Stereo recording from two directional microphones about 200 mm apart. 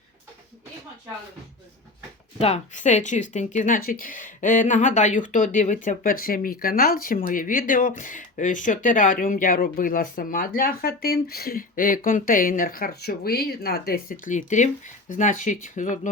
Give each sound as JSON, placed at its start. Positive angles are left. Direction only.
{"t": 2.4, "sound": "speech", "side_deg": 35}